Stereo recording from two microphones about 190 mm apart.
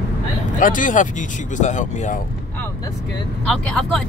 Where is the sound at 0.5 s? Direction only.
45° left (ahead or behind).